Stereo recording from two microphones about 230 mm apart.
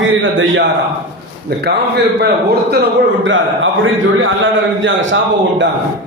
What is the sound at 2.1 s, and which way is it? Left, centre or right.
A man's voice, right.